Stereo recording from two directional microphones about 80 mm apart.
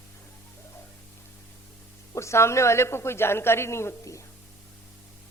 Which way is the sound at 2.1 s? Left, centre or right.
Left.